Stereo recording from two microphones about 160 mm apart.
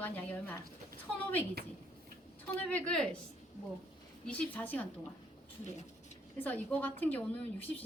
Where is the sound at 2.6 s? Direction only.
10° left (ahead or behind).